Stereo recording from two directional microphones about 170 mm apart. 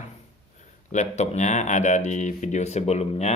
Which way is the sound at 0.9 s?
40° left (ahead or behind).